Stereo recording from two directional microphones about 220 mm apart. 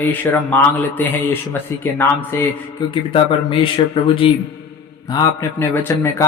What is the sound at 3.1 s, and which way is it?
Speech, 25° left (ahead or behind).